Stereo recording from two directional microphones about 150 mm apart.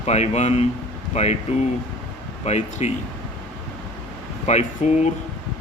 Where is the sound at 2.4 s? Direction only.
45° left (ahead or behind).